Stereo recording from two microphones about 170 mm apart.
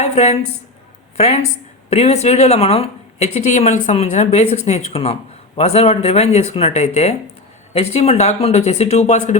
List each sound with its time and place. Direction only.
0.0 s a woman's voice: 40° left (ahead or behind)